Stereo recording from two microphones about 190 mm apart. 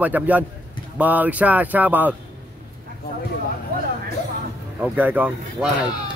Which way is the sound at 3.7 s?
45° right (ahead or behind).